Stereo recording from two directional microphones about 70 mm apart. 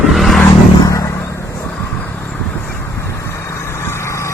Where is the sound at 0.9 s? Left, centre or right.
Left.